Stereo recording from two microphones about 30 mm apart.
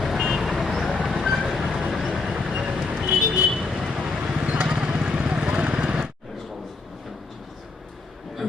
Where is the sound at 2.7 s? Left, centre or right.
Centre.